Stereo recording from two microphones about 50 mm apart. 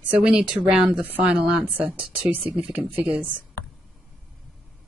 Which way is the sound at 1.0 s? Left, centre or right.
Right.